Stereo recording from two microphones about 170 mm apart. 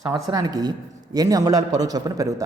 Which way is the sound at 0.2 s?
20° right (ahead or behind).